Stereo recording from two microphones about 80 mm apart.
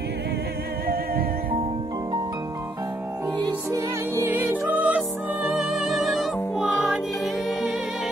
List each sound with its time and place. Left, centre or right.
4.1 s music: right
5.6 s music: centre